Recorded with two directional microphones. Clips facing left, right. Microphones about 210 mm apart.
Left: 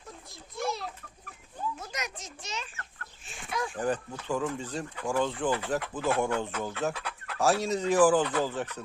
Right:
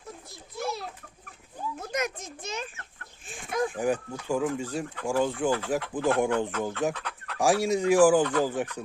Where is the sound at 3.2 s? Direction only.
50° right (ahead or behind).